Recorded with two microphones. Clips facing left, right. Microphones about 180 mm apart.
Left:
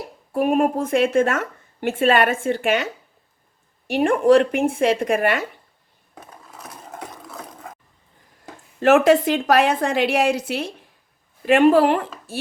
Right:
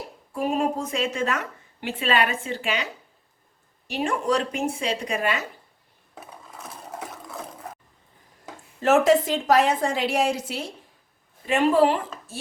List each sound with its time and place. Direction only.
0.3 s a woman's voice: 55° left (ahead or behind)
6.1 s a sound: centre (ahead or behind)
8.8 s a woman's voice: 65° left (ahead or behind)